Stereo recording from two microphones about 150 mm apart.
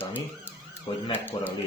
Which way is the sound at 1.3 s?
35° left (ahead or behind).